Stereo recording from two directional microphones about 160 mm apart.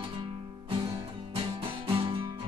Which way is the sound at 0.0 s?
30° right (ahead or behind).